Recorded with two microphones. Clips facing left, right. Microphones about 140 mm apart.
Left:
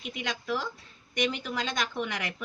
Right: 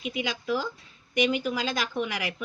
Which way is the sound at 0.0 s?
5° right (ahead or behind).